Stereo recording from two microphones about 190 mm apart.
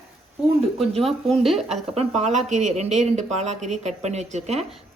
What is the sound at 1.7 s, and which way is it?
Speech, 35° right (ahead or behind).